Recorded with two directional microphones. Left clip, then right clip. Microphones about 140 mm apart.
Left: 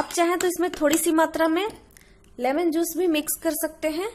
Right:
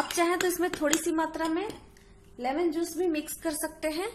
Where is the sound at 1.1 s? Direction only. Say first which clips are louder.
Left 8 dB; 60° left (ahead or behind).